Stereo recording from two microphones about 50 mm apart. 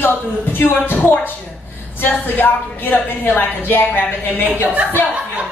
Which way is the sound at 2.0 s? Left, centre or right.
Left.